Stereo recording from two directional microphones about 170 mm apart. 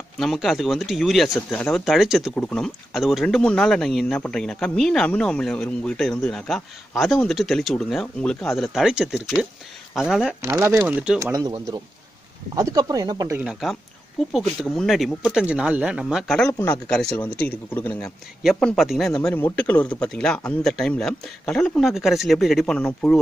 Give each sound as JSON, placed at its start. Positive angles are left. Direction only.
{"t": 0.2, "sound": "speech", "side_deg": 0}
{"t": 10.4, "sound": "speech", "side_deg": -15}
{"t": 12.5, "sound": "speech", "side_deg": -20}
{"t": 13.4, "sound": "a man's voice", "side_deg": 0}
{"t": 18.0, "sound": "speech", "side_deg": 0}